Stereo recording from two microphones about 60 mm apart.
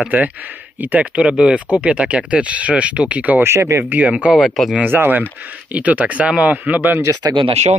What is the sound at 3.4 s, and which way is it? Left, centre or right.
Speech, right.